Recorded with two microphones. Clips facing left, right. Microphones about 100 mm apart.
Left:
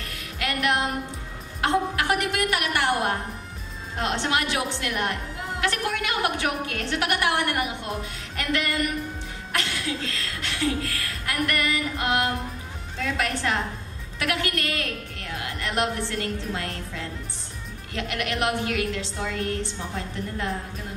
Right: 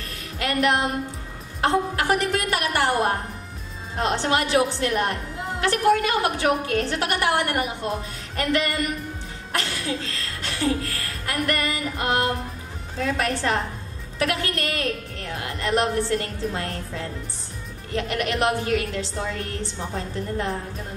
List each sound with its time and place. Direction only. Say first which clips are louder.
0.4 s music: right 3 dB; 30° right (ahead or behind)
1.6 s a woman's voice: right 2 dB; 30° right (ahead or behind)